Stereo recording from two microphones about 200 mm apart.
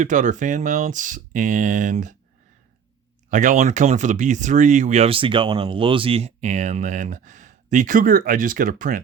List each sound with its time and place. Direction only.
0.0 s speech: 40° right (ahead or behind)
3.2 s speech: 40° right (ahead or behind)